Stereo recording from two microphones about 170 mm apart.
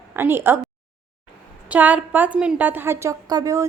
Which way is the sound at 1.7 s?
10° right (ahead or behind).